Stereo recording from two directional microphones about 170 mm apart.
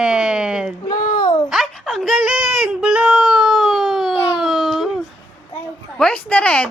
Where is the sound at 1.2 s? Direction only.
25° left (ahead or behind).